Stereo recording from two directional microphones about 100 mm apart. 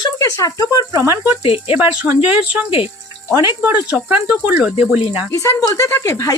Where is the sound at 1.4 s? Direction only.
70° left (ahead or behind).